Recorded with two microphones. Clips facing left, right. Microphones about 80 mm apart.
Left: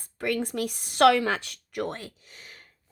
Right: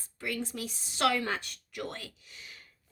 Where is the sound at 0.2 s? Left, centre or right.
Left.